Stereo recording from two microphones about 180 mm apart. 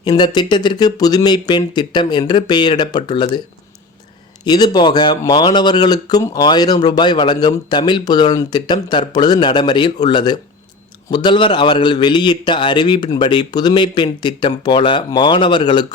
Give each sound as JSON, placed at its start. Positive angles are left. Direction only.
{"t": 0.0, "sound": "speech", "side_deg": 25}
{"t": 4.4, "sound": "speech", "side_deg": 25}